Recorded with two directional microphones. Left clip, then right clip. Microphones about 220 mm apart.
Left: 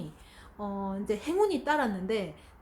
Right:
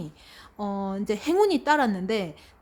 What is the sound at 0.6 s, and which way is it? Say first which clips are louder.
A woman's voice: right 5 dB; 45° right (ahead or behind).